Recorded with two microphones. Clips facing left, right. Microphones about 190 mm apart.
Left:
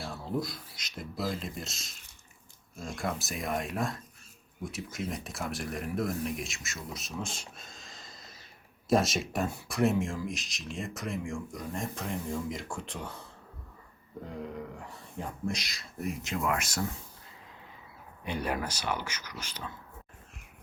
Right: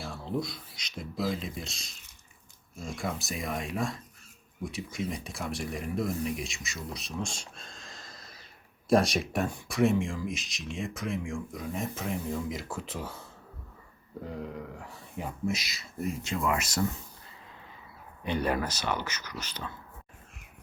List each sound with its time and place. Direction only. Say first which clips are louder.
0.0 s speech: even; centre (ahead or behind)
14.5 s speech: even; centre (ahead or behind)
18.3 s speech: right 4 dB; 10° left (ahead or behind)